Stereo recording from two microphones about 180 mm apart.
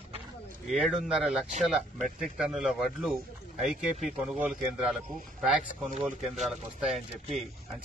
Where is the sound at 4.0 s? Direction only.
40° right (ahead or behind).